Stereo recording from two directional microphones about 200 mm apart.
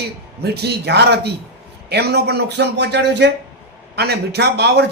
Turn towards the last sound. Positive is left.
turn(degrees=-55)  # may be behind; listen again after turning